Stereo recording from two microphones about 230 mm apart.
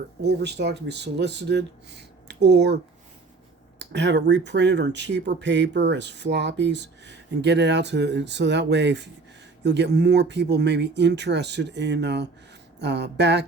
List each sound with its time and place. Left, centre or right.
0.2 s speech: right
3.8 s speech: right